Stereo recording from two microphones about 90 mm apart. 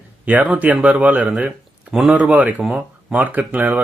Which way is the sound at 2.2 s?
15° right (ahead or behind).